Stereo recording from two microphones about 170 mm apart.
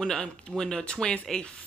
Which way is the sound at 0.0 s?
5° left (ahead or behind).